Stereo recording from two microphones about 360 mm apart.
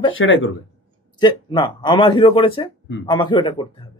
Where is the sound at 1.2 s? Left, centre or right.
Centre.